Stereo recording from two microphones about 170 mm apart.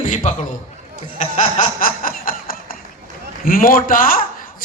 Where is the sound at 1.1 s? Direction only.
45° left (ahead or behind).